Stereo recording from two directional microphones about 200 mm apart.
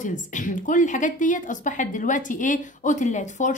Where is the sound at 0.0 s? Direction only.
40° left (ahead or behind).